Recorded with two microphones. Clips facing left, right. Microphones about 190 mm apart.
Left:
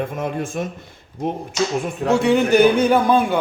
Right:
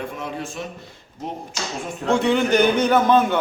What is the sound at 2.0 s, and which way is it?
A man's voice, 10° left (ahead or behind).